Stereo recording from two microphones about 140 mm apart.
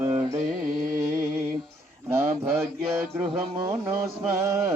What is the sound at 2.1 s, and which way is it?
Speech, 15° right (ahead or behind).